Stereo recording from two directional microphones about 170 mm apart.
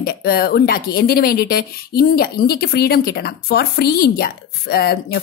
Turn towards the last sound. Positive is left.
turn(degrees=65)  # may be behind; listen again after turning